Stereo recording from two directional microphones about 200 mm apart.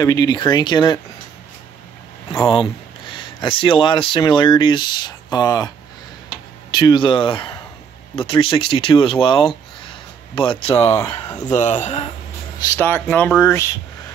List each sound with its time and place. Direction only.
0.0 s speech: 20° left (ahead or behind)
2.5 s speech: 25° left (ahead or behind)
6.7 s speech: 20° left (ahead or behind)
9.8 s a sound: 25° left (ahead or behind)
11.1 s speech: 20° left (ahead or behind)
11.5 s speech: 35° left (ahead or behind)
12.5 s speech: 15° left (ahead or behind)